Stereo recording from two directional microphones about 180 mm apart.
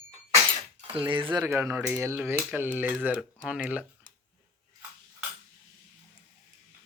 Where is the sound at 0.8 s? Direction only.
30° right (ahead or behind).